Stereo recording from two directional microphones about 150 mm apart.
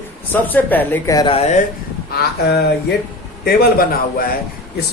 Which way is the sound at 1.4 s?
50° left (ahead or behind).